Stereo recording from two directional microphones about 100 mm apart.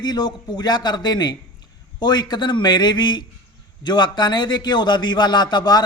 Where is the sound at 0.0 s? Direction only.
45° left (ahead or behind).